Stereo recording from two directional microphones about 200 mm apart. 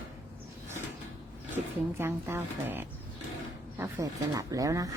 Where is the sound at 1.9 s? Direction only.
10° right (ahead or behind).